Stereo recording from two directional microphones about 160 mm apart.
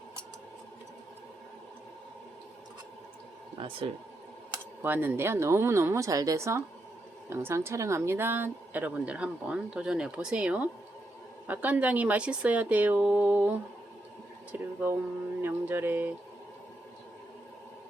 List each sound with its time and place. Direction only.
3.6 s speech: 35° right (ahead or behind)
4.8 s speech: 15° right (ahead or behind)
14.6 s speech: 15° right (ahead or behind)